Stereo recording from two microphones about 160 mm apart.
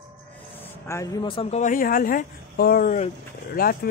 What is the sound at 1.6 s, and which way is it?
Speech, 60° left (ahead or behind).